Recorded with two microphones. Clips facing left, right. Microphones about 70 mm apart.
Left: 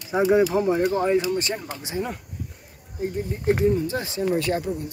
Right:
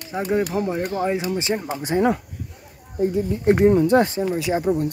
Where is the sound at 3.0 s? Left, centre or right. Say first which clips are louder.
Right 6 dB; right.